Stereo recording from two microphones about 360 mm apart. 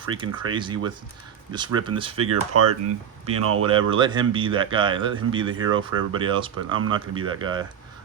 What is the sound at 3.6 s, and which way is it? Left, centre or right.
Speech, centre.